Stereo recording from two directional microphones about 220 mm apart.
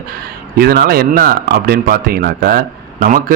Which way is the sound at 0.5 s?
45° right (ahead or behind).